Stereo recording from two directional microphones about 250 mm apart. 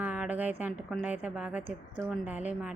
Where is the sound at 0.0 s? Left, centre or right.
Centre.